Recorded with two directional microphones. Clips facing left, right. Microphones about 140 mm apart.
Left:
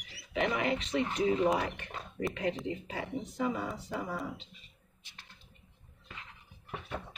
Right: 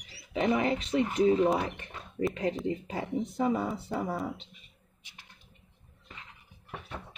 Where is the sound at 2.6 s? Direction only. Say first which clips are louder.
Right 4 dB; 35° right (ahead or behind).